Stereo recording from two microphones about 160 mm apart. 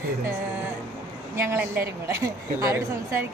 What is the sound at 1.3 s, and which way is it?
A woman's voice, 15° right (ahead or behind).